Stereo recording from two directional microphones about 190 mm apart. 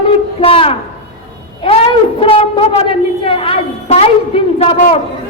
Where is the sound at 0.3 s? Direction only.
30° left (ahead or behind).